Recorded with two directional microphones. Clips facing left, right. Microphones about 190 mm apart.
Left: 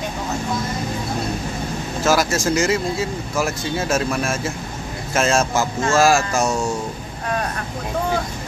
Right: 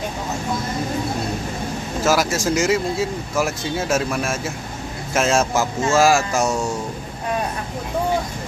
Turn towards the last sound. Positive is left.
turn(degrees=0)  # may be behind; listen again after turning